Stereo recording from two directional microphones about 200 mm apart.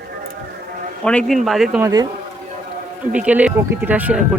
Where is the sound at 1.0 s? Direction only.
Centre (ahead or behind).